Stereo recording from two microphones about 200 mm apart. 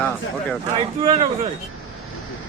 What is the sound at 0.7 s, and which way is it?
Speech, 30° right (ahead or behind).